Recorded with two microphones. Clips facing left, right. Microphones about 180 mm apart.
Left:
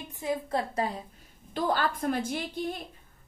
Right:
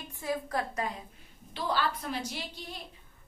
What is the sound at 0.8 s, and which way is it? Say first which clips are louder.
Speech: left 4 dB; 30° left (ahead or behind).